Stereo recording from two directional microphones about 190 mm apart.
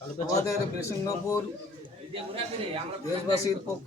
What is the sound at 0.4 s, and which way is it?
Speech, 15° left (ahead or behind).